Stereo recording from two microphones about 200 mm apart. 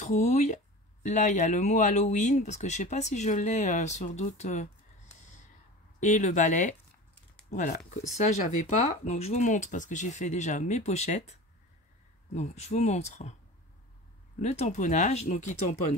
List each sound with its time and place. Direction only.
0.0 s speech: 35° left (ahead or behind)
5.9 s speech: 35° left (ahead or behind)
12.4 s speech: 35° left (ahead or behind)
14.4 s speech: 35° left (ahead or behind)